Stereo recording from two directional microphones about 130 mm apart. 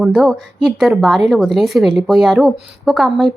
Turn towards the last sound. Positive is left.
turn(degrees=0)  # may be behind; listen again after turning